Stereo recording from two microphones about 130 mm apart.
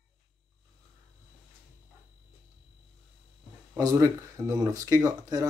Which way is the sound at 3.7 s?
25° right (ahead or behind).